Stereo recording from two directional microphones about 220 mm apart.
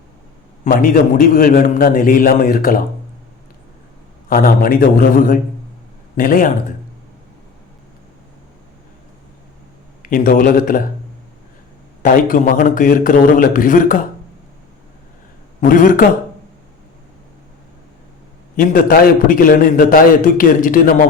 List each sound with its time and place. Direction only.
0.6 s a man's voice: 40° left (ahead or behind)
4.3 s a man's voice: 40° left (ahead or behind)
10.0 s a man's voice: 40° left (ahead or behind)
12.0 s a man's voice: 40° left (ahead or behind)
15.6 s a man's voice: 35° left (ahead or behind)
18.5 s a man's voice: 40° left (ahead or behind)